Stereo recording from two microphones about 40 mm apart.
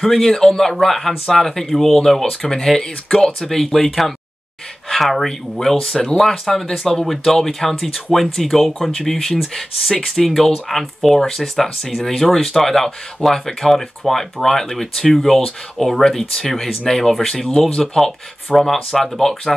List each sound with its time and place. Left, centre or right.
0.0 s speech: centre